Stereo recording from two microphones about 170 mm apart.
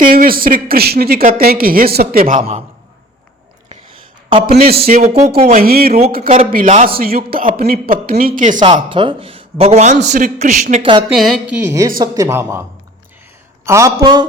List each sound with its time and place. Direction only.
0.0 s speech: 55° right (ahead or behind)
2.4 s speech: 35° right (ahead or behind)
4.3 s a man's voice: 30° right (ahead or behind)
4.6 s speech: 65° right (ahead or behind)
5.4 s speech: 45° right (ahead or behind)
5.6 s speech: 60° right (ahead or behind)
6.9 s speech: 60° right (ahead or behind)
8.6 s speech: 30° right (ahead or behind); by 10.8 s 45° right (ahead or behind)
11.1 s a woman's voice: centre (ahead or behind)
11.5 s speech: 15° right (ahead or behind)
13.7 s speech: 20° right (ahead or behind)